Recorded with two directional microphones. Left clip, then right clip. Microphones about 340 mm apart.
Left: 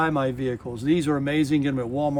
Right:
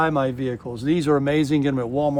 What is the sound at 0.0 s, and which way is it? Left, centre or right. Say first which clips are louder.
Speech: right 2 dB; centre.